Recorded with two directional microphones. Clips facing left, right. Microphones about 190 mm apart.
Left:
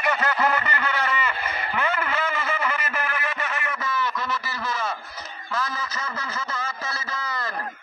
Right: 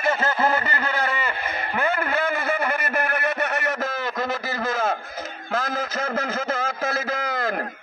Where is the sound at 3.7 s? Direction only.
50° right (ahead or behind).